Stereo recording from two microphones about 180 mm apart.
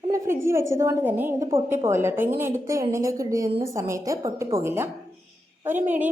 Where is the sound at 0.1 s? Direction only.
15° right (ahead or behind).